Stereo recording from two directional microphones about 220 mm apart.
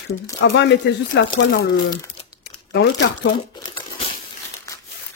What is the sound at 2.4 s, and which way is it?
Crumpling, 55° left (ahead or behind).